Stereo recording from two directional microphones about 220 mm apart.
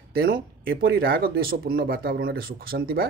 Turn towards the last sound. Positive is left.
turn(degrees=-45)  # may be behind; listen again after turning